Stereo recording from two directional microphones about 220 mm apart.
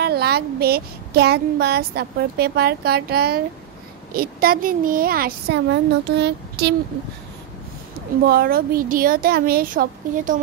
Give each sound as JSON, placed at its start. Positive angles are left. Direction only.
{"t": 0.0, "sound": "speech", "side_deg": -45}
{"t": 8.3, "sound": "speech", "side_deg": -40}